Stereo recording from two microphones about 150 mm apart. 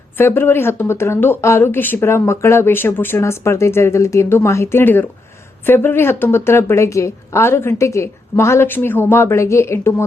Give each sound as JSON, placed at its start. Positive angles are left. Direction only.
{"t": 0.2, "sound": "speech", "side_deg": 15}